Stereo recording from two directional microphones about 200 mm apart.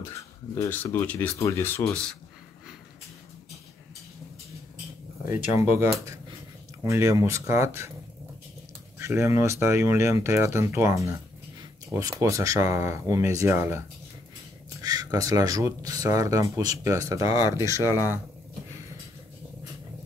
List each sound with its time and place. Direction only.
0.6 s speech: 10° left (ahead or behind)
5.2 s speech: 15° right (ahead or behind)
8.9 s speech: 15° right (ahead or behind)
17.8 s speech: 15° left (ahead or behind)